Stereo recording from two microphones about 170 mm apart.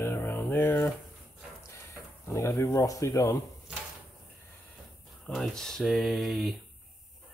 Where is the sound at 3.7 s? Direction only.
5° right (ahead or behind).